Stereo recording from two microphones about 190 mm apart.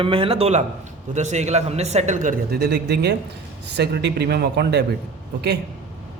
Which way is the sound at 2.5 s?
60° right (ahead or behind).